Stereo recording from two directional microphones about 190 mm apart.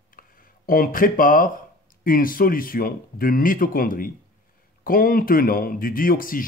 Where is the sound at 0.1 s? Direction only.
50° left (ahead or behind).